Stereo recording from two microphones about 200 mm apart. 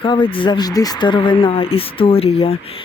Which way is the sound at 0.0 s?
25° left (ahead or behind).